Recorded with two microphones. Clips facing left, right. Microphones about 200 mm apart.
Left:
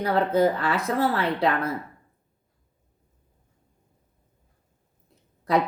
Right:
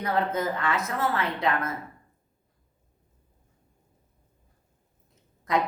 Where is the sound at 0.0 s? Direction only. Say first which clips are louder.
Left 6 dB; 35° left (ahead or behind).